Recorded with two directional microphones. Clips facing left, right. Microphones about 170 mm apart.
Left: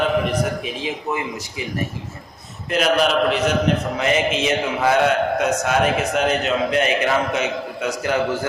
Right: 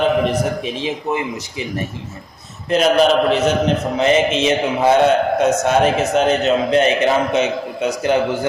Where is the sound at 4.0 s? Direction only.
25° right (ahead or behind).